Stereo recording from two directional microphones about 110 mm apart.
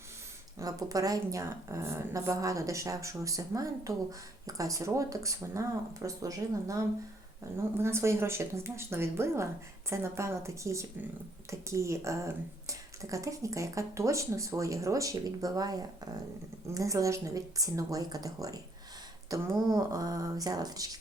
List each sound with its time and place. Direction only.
0.6 s speech: 30° right (ahead or behind)